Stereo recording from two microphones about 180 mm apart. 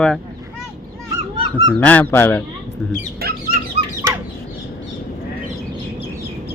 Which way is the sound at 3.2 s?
60° right (ahead or behind).